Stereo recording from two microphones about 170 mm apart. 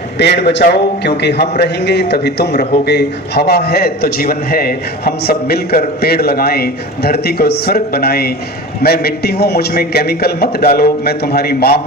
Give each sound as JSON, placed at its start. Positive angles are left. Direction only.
{"t": 0.2, "sound": "a man's voice", "side_deg": 90}